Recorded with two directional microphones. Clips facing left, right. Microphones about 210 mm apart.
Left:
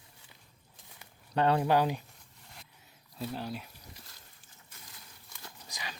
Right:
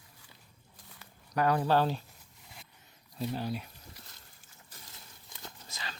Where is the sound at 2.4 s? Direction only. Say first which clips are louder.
Even; centre (ahead or behind).